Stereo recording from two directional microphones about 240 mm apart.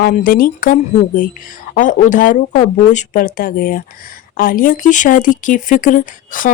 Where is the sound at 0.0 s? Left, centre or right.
Left.